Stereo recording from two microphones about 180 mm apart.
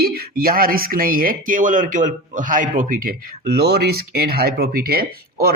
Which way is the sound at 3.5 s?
60° right (ahead or behind).